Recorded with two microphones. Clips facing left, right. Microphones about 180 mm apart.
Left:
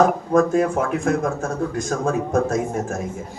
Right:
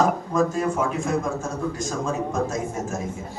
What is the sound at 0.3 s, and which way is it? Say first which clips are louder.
A man's voice: left 6 dB; 60° left (ahead or behind).